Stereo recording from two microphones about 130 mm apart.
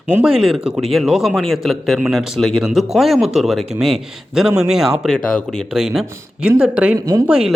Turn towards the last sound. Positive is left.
turn(degrees=-5)  # may be behind; listen again after turning